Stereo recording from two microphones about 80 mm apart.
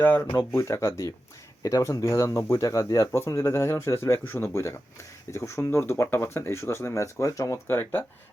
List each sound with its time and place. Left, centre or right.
0.0 s speech: left
7.7 s speech: left